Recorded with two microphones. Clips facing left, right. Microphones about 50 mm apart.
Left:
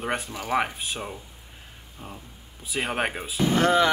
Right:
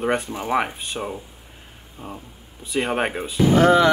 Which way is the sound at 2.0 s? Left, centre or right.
Right.